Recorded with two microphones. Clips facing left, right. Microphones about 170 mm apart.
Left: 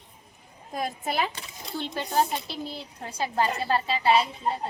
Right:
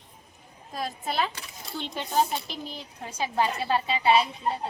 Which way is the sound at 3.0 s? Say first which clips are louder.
Even; 10° right (ahead or behind).